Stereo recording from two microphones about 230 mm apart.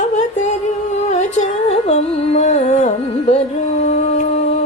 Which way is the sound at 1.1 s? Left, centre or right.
Left.